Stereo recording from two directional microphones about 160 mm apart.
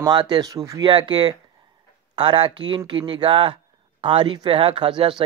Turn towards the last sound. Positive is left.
turn(degrees=-30)  # may be behind; listen again after turning